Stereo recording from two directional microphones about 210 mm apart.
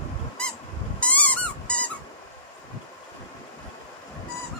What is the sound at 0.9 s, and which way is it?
Dog, 5° left (ahead or behind).